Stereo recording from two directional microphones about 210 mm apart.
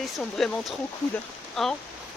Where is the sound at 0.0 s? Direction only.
Centre (ahead or behind).